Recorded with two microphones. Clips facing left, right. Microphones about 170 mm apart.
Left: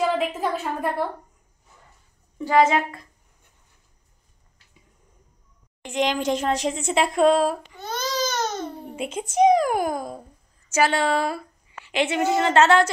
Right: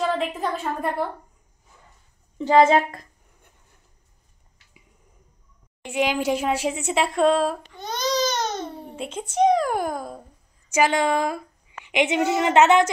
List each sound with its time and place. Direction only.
0.0 s a woman's voice: 5° left (ahead or behind)
2.3 s a woman's voice: 25° right (ahead or behind)
5.9 s a woman's voice: 10° right (ahead or behind)
7.1 s child singing: 10° left (ahead or behind)
8.5 s a child's voice: 5° left (ahead or behind)
10.7 s a woman's voice: 15° right (ahead or behind)